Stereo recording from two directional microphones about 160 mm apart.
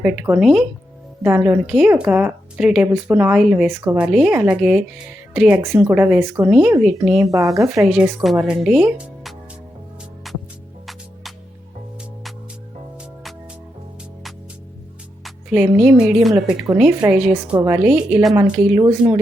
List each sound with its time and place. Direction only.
0.0 s speech: 5° right (ahead or behind)
3.7 s speech: 15° right (ahead or behind)
6.5 s speech: 5° right (ahead or behind)
10.3 s music: centre (ahead or behind)
15.2 s speech: 5° right (ahead or behind)
17.8 s speech: 5° right (ahead or behind)
18.8 s speech: 25° right (ahead or behind)